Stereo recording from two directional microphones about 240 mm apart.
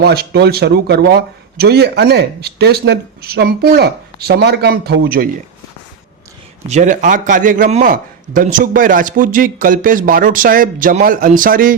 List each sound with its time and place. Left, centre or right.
0.0 s speech: right
6.7 s speech: right